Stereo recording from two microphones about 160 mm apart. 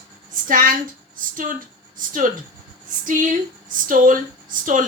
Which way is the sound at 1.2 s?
60° right (ahead or behind).